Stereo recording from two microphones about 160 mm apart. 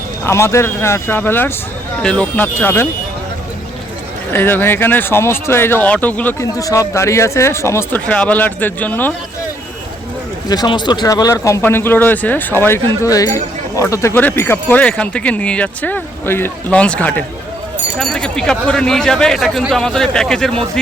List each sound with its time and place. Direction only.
0.3 s speech: 15° left (ahead or behind)
4.3 s speech: 15° left (ahead or behind)
10.5 s speech: 25° left (ahead or behind); by 20.5 s 5° left (ahead or behind)